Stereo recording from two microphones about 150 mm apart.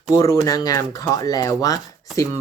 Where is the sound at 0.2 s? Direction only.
25° left (ahead or behind).